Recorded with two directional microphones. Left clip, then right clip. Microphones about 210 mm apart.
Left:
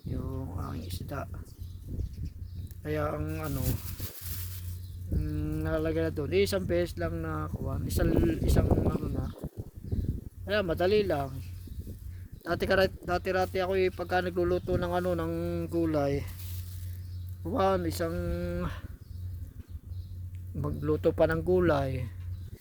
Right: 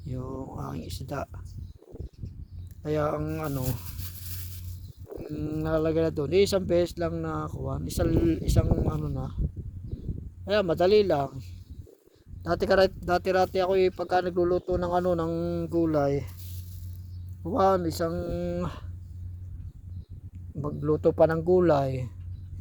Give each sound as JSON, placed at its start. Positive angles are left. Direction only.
{"t": 0.2, "sound": "a sound", "side_deg": -15}
{"t": 0.7, "sound": "speech", "side_deg": -25}
{"t": 2.8, "sound": "speech", "side_deg": -20}
{"t": 5.4, "sound": "speech", "side_deg": -20}
{"t": 10.4, "sound": "speech", "side_deg": -25}
{"t": 12.4, "sound": "speech", "side_deg": -10}
{"t": 13.1, "sound": "speech", "side_deg": -20}
{"t": 14.5, "sound": "a sound", "side_deg": 0}
{"t": 17.4, "sound": "a sound", "side_deg": -5}
{"t": 18.3, "sound": "speech", "side_deg": -10}
{"t": 20.6, "sound": "speech", "side_deg": 10}
{"t": 21.0, "sound": "a sound", "side_deg": -5}